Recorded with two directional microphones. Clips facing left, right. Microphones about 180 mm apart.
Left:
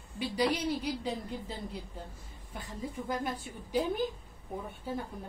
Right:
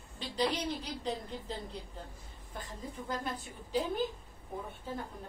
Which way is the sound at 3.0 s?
10° left (ahead or behind).